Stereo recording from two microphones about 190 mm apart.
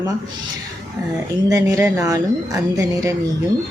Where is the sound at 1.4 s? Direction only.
15° right (ahead or behind).